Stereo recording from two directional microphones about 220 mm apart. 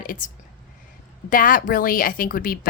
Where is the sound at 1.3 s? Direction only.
40° left (ahead or behind).